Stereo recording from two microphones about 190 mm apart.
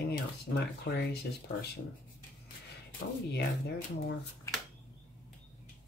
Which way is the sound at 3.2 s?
60° left (ahead or behind).